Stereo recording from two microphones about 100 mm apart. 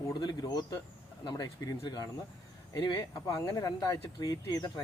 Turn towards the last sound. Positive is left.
turn(degrees=40)  # may be behind; listen again after turning